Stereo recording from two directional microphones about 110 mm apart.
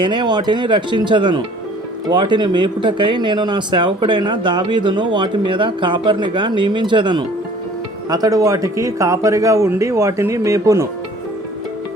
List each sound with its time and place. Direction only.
0.0 s speech: 50° right (ahead or behind)
8.1 s speech: 35° right (ahead or behind)